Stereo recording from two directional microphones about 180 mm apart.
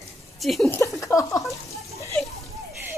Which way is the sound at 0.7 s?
15° left (ahead or behind).